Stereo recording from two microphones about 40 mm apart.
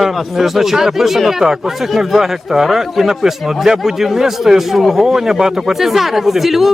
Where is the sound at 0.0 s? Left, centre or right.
Centre.